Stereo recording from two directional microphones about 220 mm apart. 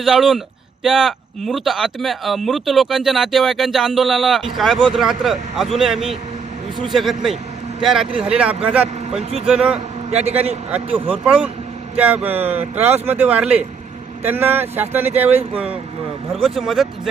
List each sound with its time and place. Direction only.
0.0 s a man's voice: centre (ahead or behind)
10.1 s a man's voice: 30° right (ahead or behind)
11.1 s speech: 5° right (ahead or behind)